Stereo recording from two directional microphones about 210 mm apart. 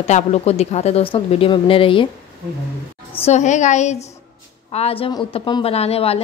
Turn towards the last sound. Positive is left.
turn(degrees=30)  # may be behind; listen again after turning